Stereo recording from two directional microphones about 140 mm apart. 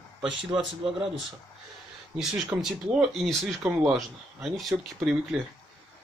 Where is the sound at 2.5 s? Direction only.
5° right (ahead or behind).